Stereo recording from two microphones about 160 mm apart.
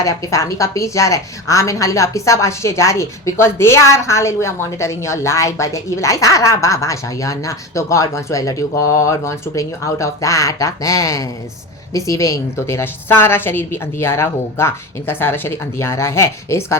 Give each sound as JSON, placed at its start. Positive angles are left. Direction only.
{"t": 0.0, "sound": "a woman's voice", "side_deg": 20}